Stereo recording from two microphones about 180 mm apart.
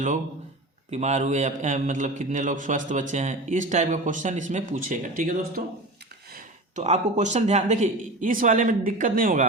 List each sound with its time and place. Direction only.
0.9 s a man's voice: 40° right (ahead or behind)
6.3 s a man's voice: 40° right (ahead or behind)